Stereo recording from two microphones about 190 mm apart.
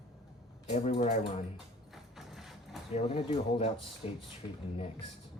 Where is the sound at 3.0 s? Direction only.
35° left (ahead or behind).